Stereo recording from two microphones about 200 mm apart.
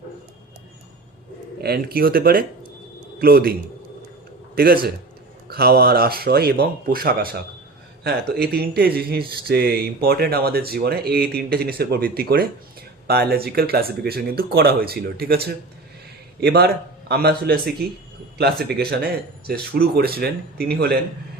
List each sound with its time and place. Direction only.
1.6 s speech: 50° right (ahead or behind)
4.5 s speech: 50° right (ahead or behind)